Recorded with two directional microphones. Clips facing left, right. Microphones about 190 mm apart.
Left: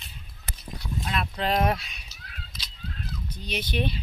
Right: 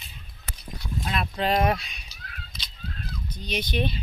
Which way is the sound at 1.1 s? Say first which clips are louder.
Right 2 dB; 5° right (ahead or behind).